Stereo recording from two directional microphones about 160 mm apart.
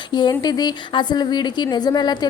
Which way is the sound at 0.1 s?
25° left (ahead or behind).